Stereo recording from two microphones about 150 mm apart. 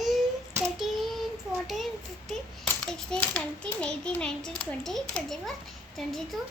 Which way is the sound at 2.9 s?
5° left (ahead or behind).